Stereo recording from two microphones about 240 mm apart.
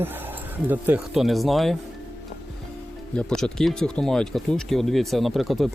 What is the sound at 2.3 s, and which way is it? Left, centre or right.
Music, left.